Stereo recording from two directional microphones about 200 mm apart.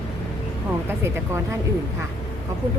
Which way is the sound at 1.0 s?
15° right (ahead or behind).